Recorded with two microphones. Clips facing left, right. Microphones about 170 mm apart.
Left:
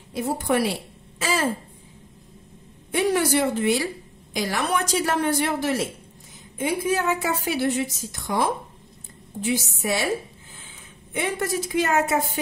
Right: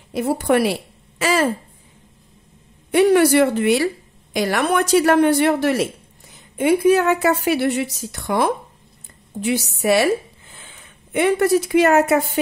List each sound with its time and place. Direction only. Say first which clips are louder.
0.1 s a woman's voice: right 6 dB; 65° right (ahead or behind)
2.9 s a woman's voice: right 8 dB; 65° right (ahead or behind)